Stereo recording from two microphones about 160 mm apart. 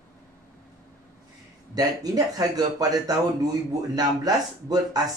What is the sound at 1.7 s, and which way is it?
Speech, 25° right (ahead or behind).